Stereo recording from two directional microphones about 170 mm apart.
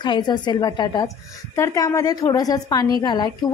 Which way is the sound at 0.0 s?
25° left (ahead or behind).